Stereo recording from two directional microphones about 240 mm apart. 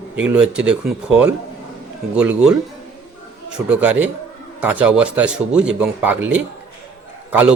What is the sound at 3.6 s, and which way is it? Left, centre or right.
Speech, centre.